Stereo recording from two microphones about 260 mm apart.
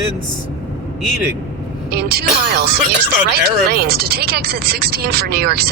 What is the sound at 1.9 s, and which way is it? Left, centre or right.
Speech, right.